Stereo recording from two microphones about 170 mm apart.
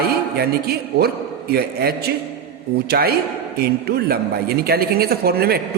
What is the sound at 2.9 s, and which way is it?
A man's voice, 65° right (ahead or behind).